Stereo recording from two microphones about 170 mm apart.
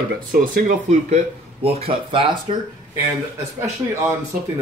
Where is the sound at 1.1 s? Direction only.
35° right (ahead or behind).